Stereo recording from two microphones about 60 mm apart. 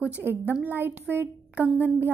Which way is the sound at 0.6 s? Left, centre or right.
Right.